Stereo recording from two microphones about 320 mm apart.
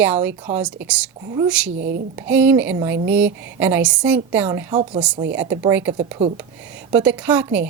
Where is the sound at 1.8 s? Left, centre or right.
Right.